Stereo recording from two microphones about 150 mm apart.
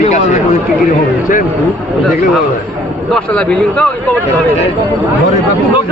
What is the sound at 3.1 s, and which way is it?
Speech, 5° left (ahead or behind).